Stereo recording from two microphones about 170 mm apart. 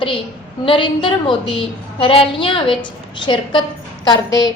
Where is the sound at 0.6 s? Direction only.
30° left (ahead or behind).